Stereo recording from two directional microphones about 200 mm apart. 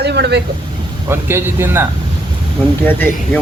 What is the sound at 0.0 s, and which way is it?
Speech, 55° right (ahead or behind).